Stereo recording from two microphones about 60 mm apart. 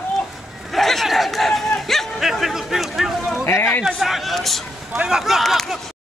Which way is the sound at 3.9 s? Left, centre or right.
Centre.